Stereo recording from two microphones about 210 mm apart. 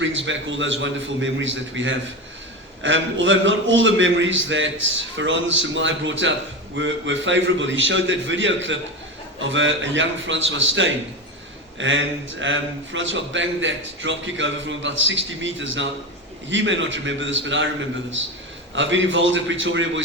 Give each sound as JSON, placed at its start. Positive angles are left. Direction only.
{"t": 0.0, "sound": "a man's voice", "side_deg": -60}
{"t": 18.7, "sound": "a man's voice", "side_deg": -60}